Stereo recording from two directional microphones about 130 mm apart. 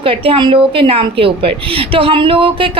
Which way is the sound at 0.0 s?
45° right (ahead or behind).